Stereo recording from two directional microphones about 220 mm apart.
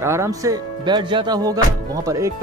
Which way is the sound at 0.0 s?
10° right (ahead or behind).